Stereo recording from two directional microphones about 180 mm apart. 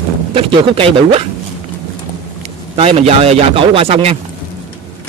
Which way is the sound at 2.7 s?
35° right (ahead or behind).